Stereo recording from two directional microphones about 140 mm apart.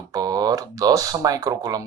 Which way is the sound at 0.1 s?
25° right (ahead or behind).